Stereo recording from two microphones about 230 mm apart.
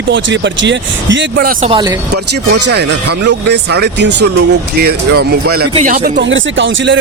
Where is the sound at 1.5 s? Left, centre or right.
Right.